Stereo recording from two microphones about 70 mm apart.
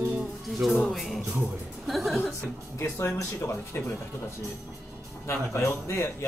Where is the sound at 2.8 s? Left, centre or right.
Left.